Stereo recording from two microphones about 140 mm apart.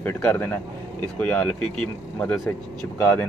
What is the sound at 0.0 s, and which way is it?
Speech, 15° left (ahead or behind).